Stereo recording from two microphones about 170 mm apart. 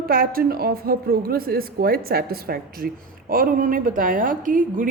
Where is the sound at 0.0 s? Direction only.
60° right (ahead or behind).